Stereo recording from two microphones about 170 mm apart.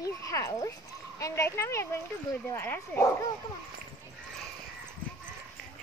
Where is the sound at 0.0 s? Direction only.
20° left (ahead or behind).